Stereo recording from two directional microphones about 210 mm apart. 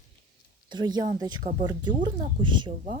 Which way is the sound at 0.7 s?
20° right (ahead or behind).